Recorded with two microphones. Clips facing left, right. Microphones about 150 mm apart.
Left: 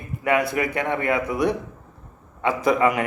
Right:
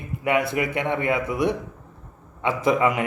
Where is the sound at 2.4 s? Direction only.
25° right (ahead or behind).